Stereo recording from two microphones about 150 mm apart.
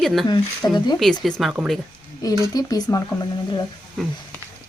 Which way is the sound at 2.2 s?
25° left (ahead or behind).